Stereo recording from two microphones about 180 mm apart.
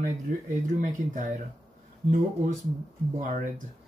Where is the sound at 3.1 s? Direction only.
45° right (ahead or behind).